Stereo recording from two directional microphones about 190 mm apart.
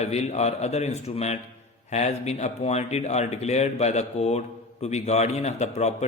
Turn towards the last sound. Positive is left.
turn(degrees=35)  # may be behind; listen again after turning